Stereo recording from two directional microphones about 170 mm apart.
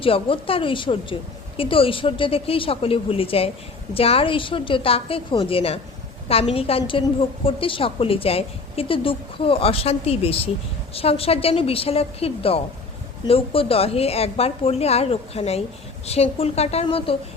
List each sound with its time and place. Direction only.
0.0 s a woman's voice: 30° left (ahead or behind)